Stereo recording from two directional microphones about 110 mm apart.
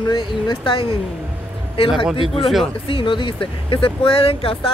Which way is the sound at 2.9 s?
50° left (ahead or behind).